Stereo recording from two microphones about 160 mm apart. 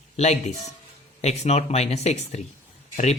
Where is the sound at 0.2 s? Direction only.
45° left (ahead or behind).